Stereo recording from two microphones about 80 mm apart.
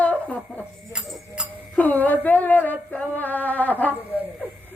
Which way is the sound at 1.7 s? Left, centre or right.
Left.